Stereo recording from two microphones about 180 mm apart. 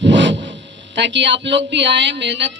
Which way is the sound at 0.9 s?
80° right.